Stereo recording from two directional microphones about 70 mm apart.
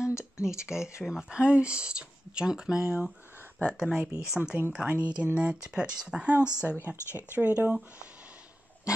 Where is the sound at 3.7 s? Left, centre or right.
Centre.